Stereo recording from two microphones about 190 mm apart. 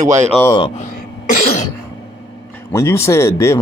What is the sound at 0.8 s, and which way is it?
Throat clearing, 50° left (ahead or behind).